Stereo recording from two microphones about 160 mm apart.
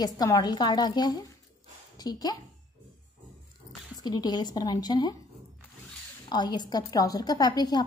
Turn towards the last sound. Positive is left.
turn(degrees=25)  # may be behind; listen again after turning